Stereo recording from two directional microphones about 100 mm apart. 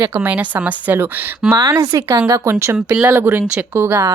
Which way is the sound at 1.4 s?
5° right (ahead or behind).